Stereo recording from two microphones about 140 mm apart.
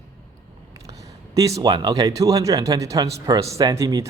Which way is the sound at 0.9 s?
25° right (ahead or behind).